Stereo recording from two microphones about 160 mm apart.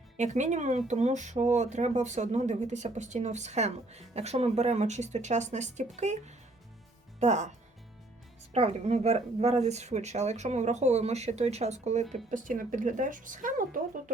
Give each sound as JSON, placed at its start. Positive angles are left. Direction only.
{"t": 0.2, "sound": "speech", "side_deg": -50}
{"t": 8.5, "sound": "speech", "side_deg": -40}